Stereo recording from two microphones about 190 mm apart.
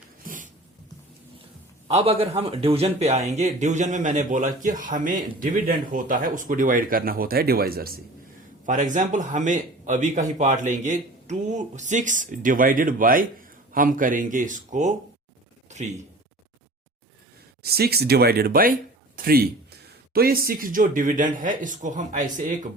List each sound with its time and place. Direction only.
0.3 s a sound: 45° right (ahead or behind)
1.9 s speech: 30° right (ahead or behind)
17.6 s speech: 55° right (ahead or behind)